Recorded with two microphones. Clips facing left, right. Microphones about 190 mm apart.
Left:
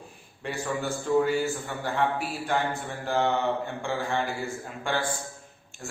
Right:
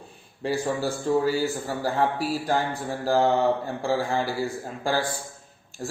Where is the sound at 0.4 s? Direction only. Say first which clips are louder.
Right 5 dB; 35° right (ahead or behind).